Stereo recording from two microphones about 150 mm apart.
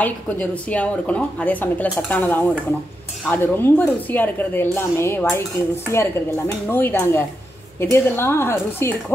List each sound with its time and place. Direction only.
0.0 s a woman's voice: 10° left (ahead or behind)